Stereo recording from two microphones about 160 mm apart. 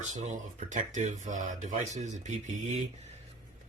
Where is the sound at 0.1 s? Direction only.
50° right (ahead or behind).